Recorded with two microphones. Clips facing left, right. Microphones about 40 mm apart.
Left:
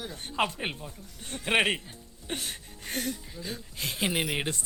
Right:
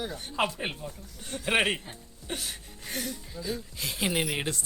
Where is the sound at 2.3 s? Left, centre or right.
Left.